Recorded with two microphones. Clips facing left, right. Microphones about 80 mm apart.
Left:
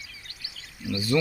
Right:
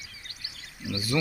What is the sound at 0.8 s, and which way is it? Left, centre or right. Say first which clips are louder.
Speech: left 4 dB; centre.